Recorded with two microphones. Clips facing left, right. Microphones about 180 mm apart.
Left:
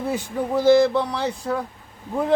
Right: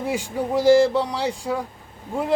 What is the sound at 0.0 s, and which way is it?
Speech, 10° right (ahead or behind).